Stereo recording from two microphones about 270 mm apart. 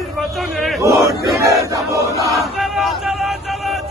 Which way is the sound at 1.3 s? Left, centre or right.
Centre.